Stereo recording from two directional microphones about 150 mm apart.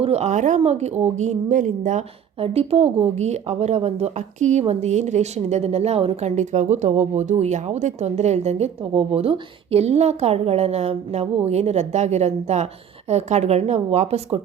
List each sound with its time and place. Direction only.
0.0 s a woman's voice: 45° right (ahead or behind)
2.4 s speech: 40° right (ahead or behind)